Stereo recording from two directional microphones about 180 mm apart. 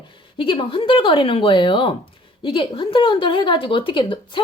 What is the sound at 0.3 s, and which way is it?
A woman's voice, 30° left (ahead or behind).